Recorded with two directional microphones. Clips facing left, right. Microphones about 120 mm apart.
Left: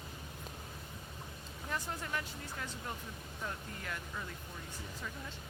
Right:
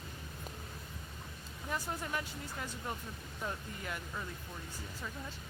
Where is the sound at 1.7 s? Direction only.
10° right (ahead or behind).